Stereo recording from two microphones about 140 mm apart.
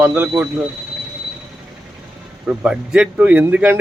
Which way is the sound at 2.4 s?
5° right (ahead or behind).